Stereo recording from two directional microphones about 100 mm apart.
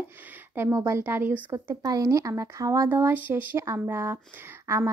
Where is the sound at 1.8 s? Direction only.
35° right (ahead or behind).